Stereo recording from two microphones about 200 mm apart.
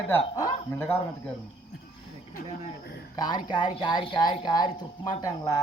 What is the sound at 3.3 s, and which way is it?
Speech, 20° left (ahead or behind).